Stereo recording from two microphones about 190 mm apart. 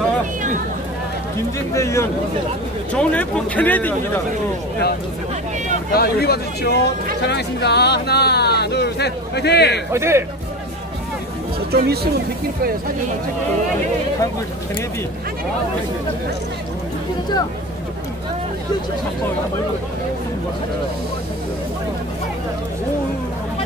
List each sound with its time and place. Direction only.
1.7 s speech: 15° left (ahead or behind)
5.9 s speech: 55° left (ahead or behind)
9.9 s speech: 15° right (ahead or behind)
11.7 s speech: 55° right (ahead or behind)